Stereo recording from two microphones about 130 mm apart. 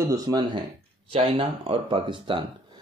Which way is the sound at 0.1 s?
30° right (ahead or behind).